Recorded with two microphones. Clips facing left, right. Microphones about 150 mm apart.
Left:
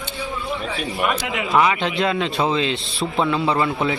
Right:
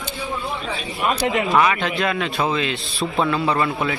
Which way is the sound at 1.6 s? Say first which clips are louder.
Even; 20° left (ahead or behind).